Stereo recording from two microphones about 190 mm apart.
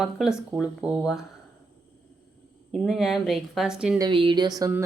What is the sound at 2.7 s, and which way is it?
Speech, centre (ahead or behind).